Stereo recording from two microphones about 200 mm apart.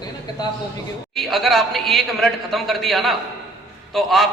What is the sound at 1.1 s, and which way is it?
A man's voice, centre (ahead or behind).